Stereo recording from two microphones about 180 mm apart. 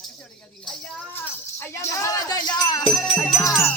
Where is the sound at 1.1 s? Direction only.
15° left (ahead or behind).